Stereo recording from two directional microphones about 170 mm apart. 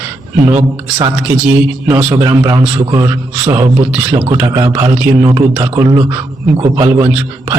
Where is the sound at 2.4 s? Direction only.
20° right (ahead or behind).